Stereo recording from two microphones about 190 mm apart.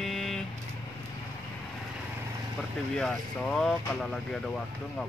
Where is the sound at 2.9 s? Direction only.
5° left (ahead or behind).